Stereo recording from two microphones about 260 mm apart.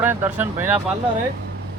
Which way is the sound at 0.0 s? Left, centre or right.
Centre.